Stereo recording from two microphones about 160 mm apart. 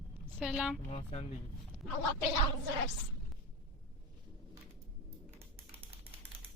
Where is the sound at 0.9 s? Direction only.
45° left (ahead or behind).